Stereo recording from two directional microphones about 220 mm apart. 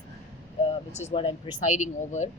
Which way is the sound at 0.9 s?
30° left (ahead or behind).